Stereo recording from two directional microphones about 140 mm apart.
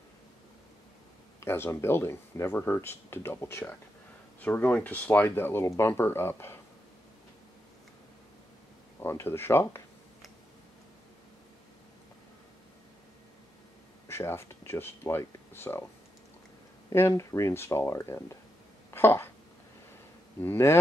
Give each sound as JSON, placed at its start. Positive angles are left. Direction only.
{"t": 1.4, "sound": "speech", "side_deg": 15}
{"t": 9.0, "sound": "speech", "side_deg": 15}
{"t": 14.0, "sound": "speech", "side_deg": 20}
{"t": 16.9, "sound": "speech", "side_deg": 20}
{"t": 18.9, "sound": "a sound", "side_deg": 15}
{"t": 20.3, "sound": "speech", "side_deg": 15}